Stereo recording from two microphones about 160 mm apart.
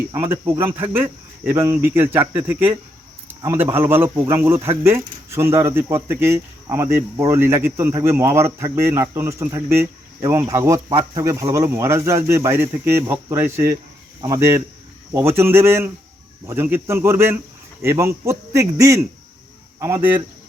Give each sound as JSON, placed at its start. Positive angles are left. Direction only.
{"t": 0.1, "sound": "a man's voice", "side_deg": -15}